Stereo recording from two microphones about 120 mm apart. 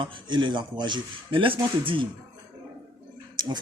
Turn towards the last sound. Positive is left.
turn(degrees=-35)  # may be behind; listen again after turning